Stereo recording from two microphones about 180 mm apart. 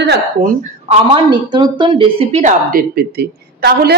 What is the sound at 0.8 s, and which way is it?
A woman's voice, 30° right (ahead or behind).